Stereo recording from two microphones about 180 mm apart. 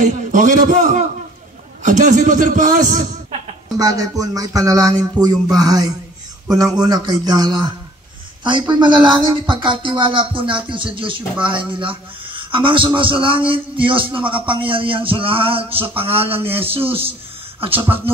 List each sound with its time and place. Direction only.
0.0 s a man's voice: 45° right (ahead or behind)
3.7 s a man's voice: 20° right (ahead or behind)